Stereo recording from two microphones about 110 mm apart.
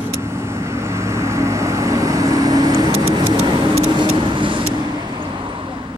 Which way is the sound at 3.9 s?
45° right (ahead or behind).